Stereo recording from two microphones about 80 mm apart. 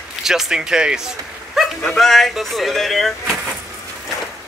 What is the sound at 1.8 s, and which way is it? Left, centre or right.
Speech, centre.